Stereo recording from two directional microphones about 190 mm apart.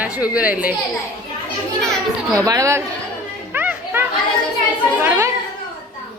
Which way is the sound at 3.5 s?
10° right (ahead or behind).